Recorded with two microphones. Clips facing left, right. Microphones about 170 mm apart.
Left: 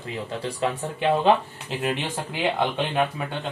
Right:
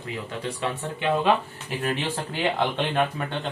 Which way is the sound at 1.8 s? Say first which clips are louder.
Even; 15° left (ahead or behind).